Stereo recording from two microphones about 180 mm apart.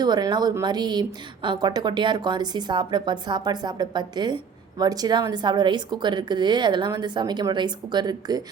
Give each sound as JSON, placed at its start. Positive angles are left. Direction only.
{"t": 0.0, "sound": "a woman's voice", "side_deg": -20}